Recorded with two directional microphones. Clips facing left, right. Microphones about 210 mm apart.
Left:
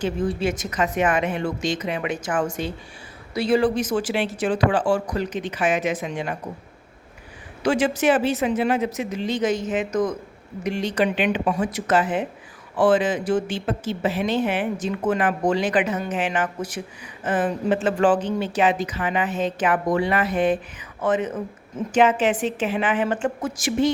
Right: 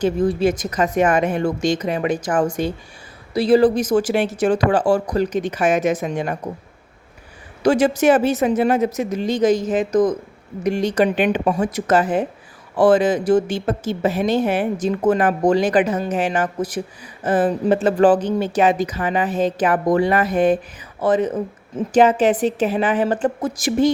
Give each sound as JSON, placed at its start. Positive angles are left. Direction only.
{"t": 0.0, "sound": "a woman's voice", "side_deg": -40}
{"t": 7.6, "sound": "a woman's voice", "side_deg": -40}